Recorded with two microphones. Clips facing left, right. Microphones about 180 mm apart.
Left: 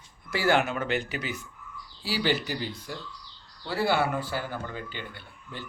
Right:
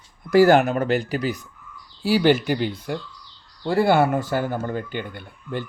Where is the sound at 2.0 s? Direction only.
50° right (ahead or behind).